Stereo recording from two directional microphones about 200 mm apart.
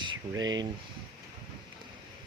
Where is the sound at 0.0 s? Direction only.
20° right (ahead or behind).